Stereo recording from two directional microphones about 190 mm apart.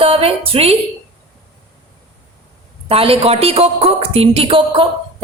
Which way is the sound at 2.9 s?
30° right (ahead or behind).